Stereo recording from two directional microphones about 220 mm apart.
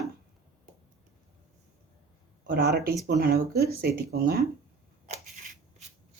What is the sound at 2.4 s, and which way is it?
Speech, 45° right (ahead or behind).